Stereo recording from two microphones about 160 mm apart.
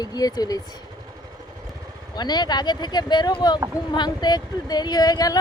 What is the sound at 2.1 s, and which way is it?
A man's voice, 25° left (ahead or behind).